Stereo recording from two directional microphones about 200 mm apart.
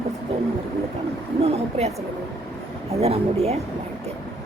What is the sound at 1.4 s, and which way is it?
Speech, 30° right (ahead or behind).